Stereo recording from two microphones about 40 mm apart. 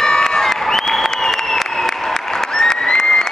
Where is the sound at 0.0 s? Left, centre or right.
Centre.